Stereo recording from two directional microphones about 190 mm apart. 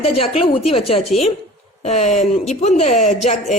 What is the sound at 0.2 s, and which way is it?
Speech, 30° left (ahead or behind).